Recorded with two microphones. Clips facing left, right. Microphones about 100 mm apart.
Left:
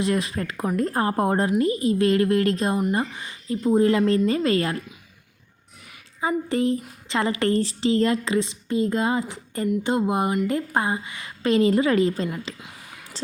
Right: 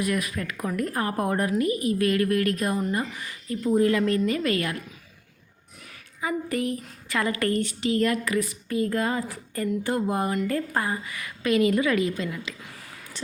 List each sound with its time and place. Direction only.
0.0 s a woman's voice: 30° left (ahead or behind)
6.1 s a woman's voice: 30° left (ahead or behind)
13.2 s a sound: 30° left (ahead or behind)